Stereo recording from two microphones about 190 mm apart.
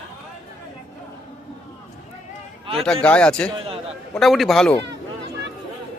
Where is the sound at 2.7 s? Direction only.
5° left (ahead or behind).